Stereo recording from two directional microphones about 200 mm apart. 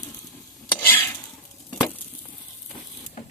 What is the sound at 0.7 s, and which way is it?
Stir, 10° left (ahead or behind).